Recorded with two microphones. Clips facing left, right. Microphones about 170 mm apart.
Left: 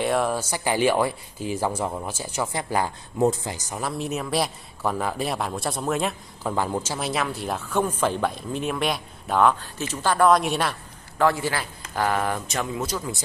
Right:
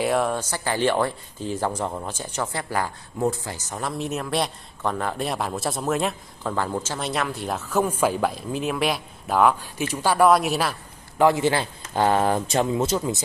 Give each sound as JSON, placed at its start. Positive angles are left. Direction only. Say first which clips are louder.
{"t": 0.0, "sound": "speech", "louder": "right 1 dB", "side_deg": 0}
{"t": 6.5, "sound": "speech", "louder": "left 1 dB", "side_deg": 15}
{"t": 11.1, "sound": "a man's voice", "louder": "right 4 dB", "side_deg": -20}